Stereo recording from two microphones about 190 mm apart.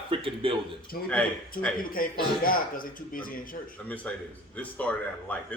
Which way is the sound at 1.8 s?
50° left (ahead or behind).